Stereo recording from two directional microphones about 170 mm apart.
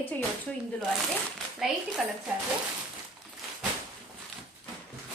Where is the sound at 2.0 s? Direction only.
Centre (ahead or behind).